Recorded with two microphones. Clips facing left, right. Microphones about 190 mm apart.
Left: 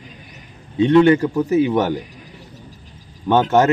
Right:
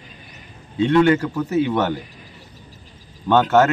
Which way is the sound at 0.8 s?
20° left (ahead or behind).